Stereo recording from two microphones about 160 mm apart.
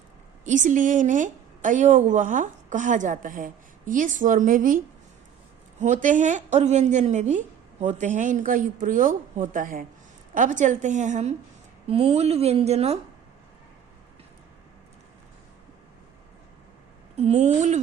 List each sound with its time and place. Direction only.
0.4 s a woman's voice: 50° right (ahead or behind)
5.8 s a woman's voice: 50° right (ahead or behind)
17.2 s a woman's voice: 40° right (ahead or behind)